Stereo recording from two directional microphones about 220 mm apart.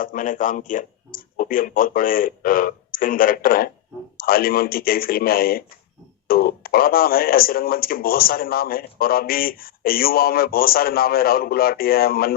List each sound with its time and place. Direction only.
0.0 s speech: 35° left (ahead or behind)